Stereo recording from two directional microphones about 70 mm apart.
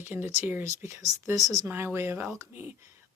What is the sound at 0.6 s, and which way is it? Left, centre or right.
Speech, right.